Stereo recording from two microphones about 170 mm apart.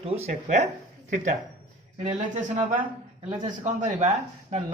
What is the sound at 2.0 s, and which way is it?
Speech, 50° right (ahead or behind).